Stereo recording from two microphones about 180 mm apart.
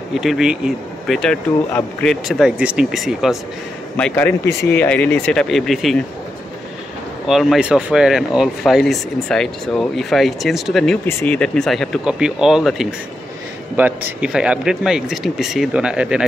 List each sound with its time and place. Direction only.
0.1 s speech: centre (ahead or behind)
3.9 s a man's voice: 10° left (ahead or behind)
7.2 s speech: centre (ahead or behind)
14.2 s speech: 5° right (ahead or behind)